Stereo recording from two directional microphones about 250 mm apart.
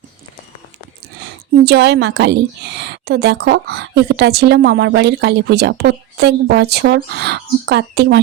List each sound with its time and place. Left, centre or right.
1.6 s a woman's voice: right